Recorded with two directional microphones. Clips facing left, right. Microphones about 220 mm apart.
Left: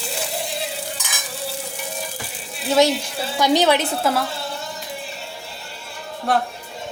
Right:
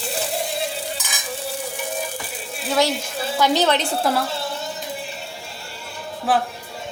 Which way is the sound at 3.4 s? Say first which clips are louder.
Left 2 dB; 15° left (ahead or behind).